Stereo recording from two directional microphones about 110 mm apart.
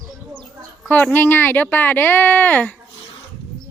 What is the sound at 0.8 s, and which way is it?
Speech, 15° left (ahead or behind).